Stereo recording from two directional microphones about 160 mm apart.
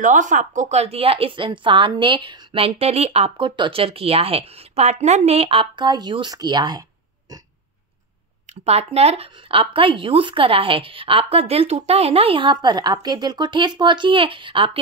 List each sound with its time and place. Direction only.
0.0 s a woman's voice: 55° right (ahead or behind); by 6.8 s 25° right (ahead or behind)
8.6 s a woman's voice: 40° right (ahead or behind)